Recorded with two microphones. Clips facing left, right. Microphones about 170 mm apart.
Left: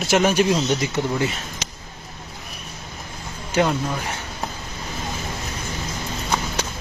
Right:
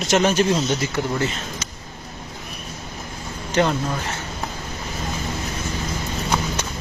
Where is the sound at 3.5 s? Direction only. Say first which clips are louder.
Even; 5° left (ahead or behind).